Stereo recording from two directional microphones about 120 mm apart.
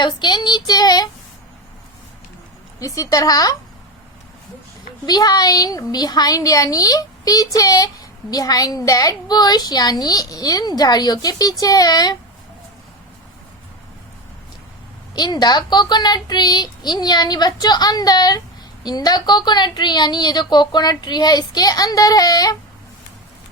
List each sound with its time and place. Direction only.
0.0 s child singing: 40° left (ahead or behind)
2.7 s a woman's voice: 30° left (ahead or behind)
5.0 s a woman's voice: 35° left (ahead or behind)
15.1 s a woman's voice: 35° left (ahead or behind)